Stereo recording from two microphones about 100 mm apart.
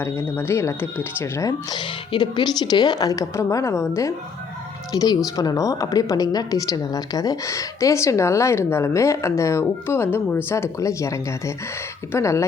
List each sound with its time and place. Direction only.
0.0 s speech: 25° left (ahead or behind)
1.7 s a woman's voice: 50° left (ahead or behind); by 12.5 s 30° left (ahead or behind)